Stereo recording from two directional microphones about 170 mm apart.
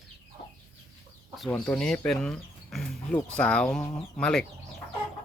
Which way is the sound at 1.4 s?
5° left (ahead or behind).